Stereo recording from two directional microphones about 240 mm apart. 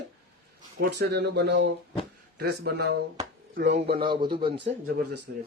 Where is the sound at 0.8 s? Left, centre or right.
Right.